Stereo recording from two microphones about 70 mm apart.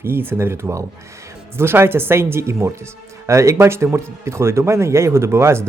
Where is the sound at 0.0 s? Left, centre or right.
Right.